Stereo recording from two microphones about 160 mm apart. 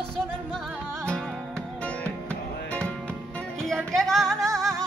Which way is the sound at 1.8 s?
10° left (ahead or behind).